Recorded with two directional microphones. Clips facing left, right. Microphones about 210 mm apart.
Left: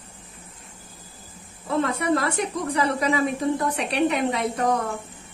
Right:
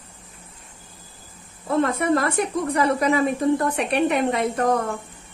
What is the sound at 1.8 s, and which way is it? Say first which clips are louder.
A woman's voice: right 1 dB; 50° right (ahead or behind).